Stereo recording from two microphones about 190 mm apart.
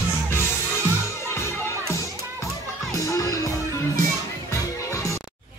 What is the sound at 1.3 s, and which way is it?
Music, 15° left (ahead or behind).